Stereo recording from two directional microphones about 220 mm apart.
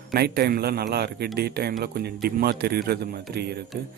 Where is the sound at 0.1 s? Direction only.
45° right (ahead or behind).